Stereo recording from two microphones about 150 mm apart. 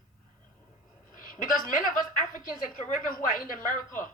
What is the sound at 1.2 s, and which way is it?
A woman's voice, 65° left (ahead or behind).